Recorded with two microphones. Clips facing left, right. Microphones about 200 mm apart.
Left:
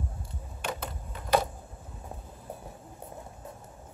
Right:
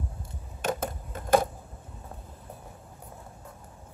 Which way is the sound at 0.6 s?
45° right (ahead or behind).